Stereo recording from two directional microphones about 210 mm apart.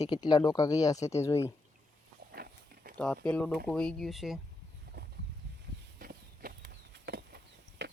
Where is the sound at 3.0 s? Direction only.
5° left (ahead or behind).